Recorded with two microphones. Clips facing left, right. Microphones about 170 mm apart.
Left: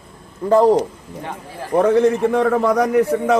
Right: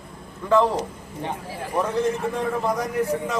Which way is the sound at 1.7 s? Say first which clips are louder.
Left 9 dB; 65° left (ahead or behind).